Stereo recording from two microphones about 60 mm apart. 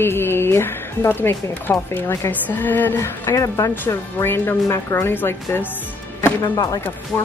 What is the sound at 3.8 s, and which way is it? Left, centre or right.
Speech, left.